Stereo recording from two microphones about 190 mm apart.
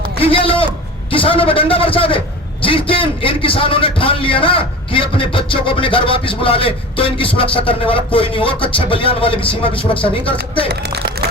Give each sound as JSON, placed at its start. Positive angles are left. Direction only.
{"t": 0.2, "sound": "a man's voice", "side_deg": 30}
{"t": 10.7, "sound": "speech", "side_deg": -60}